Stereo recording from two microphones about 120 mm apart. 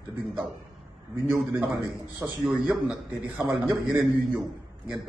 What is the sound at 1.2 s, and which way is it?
Speech, 20° right (ahead or behind).